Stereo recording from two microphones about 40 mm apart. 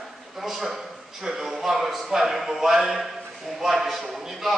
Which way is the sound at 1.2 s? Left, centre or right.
Centre.